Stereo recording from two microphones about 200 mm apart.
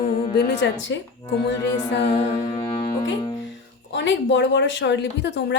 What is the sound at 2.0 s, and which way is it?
Music, 30° left (ahead or behind).